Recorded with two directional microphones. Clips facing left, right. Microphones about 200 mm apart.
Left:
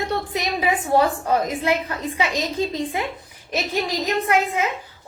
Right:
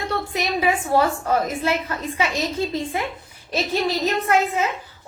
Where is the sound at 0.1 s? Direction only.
15° left (ahead or behind).